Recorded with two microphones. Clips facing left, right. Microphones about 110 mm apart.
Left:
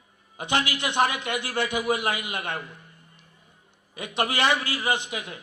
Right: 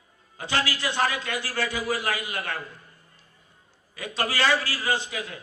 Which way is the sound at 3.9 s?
20° left (ahead or behind).